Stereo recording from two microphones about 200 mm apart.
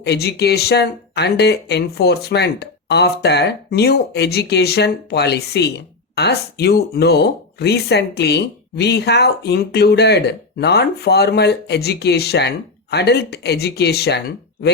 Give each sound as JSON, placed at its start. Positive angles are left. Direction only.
{"t": 0.0, "sound": "speech", "side_deg": 55}